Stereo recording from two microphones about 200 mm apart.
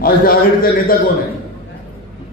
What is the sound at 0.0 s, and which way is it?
A man's voice, 45° left (ahead or behind).